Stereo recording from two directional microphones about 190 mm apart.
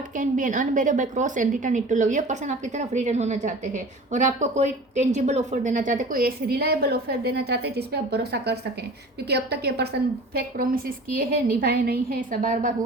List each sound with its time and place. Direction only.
0.2 s a woman's voice: 45° right (ahead or behind)